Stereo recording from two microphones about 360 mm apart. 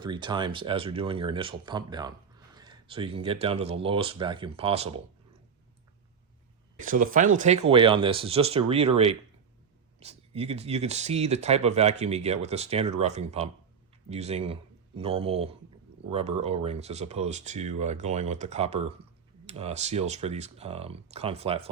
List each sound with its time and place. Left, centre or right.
0.0 s speech: centre
2.6 s a sound: centre
3.4 s speech: centre
6.8 s speech: right